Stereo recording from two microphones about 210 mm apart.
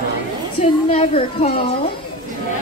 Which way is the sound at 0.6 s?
30° left (ahead or behind).